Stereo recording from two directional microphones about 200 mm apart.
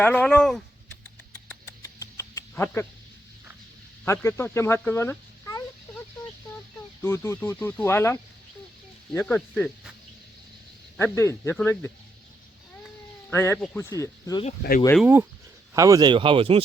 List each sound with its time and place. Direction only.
0.0 s speech: 5° left (ahead or behind)
1.8 s a sound: 15° left (ahead or behind)
4.0 s speech: 15° left (ahead or behind)
7.0 s speech: 10° left (ahead or behind)
10.9 s speech: 15° left (ahead or behind)
13.3 s speech: 10° left (ahead or behind)
15.0 s speech: 10° right (ahead or behind); by 16.6 s 25° right (ahead or behind)